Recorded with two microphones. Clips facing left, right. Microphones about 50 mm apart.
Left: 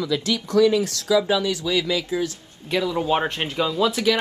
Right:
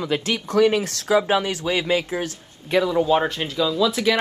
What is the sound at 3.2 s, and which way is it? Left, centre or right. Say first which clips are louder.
Speech: right 1 dB; left.